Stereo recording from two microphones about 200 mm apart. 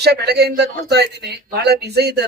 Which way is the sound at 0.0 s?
55° right (ahead or behind).